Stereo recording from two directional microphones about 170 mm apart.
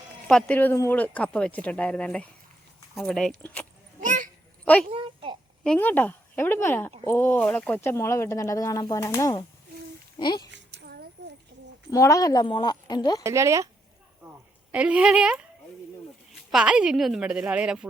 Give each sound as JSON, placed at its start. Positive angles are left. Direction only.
{"t": 0.3, "sound": "a woman's voice", "side_deg": 5}
{"t": 4.0, "sound": "a sound", "side_deg": -50}
{"t": 4.6, "sound": "speech", "side_deg": 10}
{"t": 4.9, "sound": "a sound", "side_deg": -30}
{"t": 5.6, "sound": "a woman's voice", "side_deg": 10}
{"t": 10.5, "sound": "a sound", "side_deg": -90}
{"t": 11.9, "sound": "a woman's voice", "side_deg": 20}
{"t": 13.2, "sound": "speech", "side_deg": -15}
{"t": 14.7, "sound": "a woman's voice", "side_deg": -5}